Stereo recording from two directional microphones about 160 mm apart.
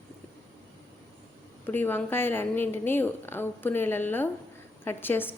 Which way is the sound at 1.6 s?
10° left (ahead or behind).